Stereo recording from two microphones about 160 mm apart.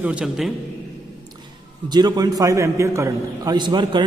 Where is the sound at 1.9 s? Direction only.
25° right (ahead or behind).